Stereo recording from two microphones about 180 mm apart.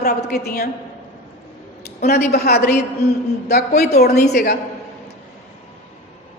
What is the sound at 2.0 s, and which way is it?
Speech, 60° left (ahead or behind).